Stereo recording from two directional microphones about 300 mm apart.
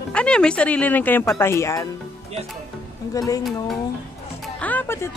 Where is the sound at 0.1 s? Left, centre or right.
Centre.